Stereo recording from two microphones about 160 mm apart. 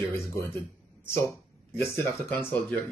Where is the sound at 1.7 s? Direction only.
15° left (ahead or behind).